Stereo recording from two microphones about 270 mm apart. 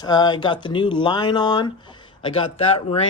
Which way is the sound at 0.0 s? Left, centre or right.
Centre.